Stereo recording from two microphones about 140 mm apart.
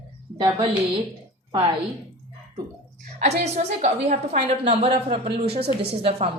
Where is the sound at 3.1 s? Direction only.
55° right (ahead or behind).